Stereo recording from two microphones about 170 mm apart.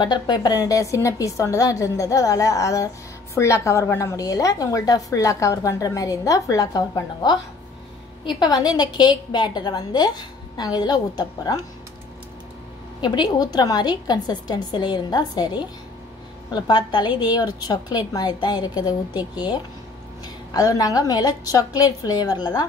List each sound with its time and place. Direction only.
0.0 s a woman's voice: 25° left (ahead or behind)
8.3 s a woman's voice: 25° left (ahead or behind)
13.0 s a woman's voice: 25° left (ahead or behind)